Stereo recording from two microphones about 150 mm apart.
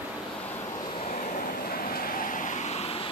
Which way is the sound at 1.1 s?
55° left (ahead or behind).